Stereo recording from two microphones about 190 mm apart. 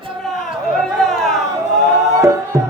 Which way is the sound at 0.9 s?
Centre (ahead or behind).